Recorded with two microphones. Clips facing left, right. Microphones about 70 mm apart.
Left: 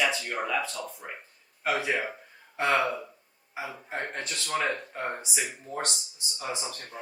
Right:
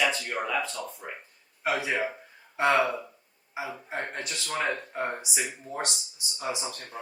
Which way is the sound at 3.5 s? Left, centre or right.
Centre.